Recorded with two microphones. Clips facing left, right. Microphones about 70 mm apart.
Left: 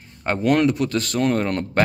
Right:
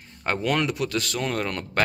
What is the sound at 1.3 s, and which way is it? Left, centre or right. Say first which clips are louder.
Speech: left 6 dB; left.